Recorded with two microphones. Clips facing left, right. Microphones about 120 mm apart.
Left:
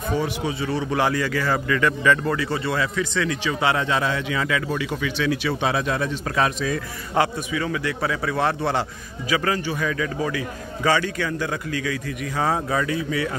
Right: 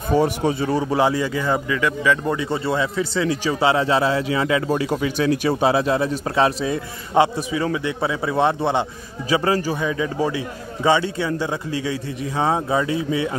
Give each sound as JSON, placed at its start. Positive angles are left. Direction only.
{"t": 0.1, "sound": "a man's voice", "side_deg": -40}
{"t": 0.9, "sound": "a man's voice", "side_deg": -20}
{"t": 1.7, "sound": "speech", "side_deg": -10}
{"t": 2.3, "sound": "a man's voice", "side_deg": -20}
{"t": 9.3, "sound": "a man's voice", "side_deg": -30}
{"t": 9.8, "sound": "a man's voice", "side_deg": -20}